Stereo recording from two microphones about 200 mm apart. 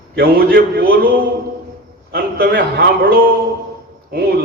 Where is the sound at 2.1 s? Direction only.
50° right (ahead or behind).